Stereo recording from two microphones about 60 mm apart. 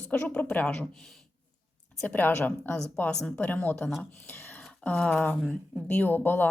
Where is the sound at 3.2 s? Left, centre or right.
Centre.